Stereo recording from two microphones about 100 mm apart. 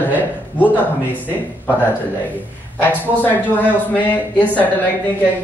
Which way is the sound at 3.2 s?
15° left (ahead or behind).